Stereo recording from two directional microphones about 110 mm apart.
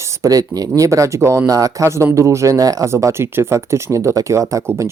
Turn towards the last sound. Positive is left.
turn(degrees=-25)  # may be behind; listen again after turning